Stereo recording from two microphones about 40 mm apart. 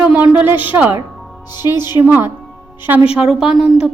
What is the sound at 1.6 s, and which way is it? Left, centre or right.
Speech, right.